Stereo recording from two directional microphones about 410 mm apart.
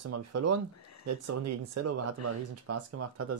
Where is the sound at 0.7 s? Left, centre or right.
Left.